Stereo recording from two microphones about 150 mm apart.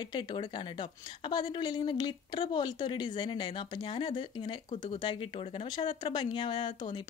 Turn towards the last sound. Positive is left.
turn(degrees=30)  # may be behind; listen again after turning